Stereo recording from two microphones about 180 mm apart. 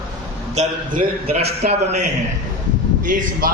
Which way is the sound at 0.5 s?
40° right (ahead or behind).